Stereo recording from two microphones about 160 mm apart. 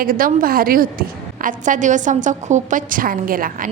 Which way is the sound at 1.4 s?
50° right (ahead or behind).